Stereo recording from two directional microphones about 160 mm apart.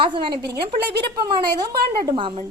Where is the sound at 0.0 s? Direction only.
30° right (ahead or behind).